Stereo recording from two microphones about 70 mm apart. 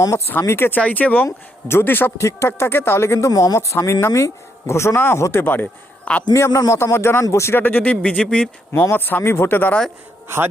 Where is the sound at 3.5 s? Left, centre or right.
Left; by 6.3 s centre.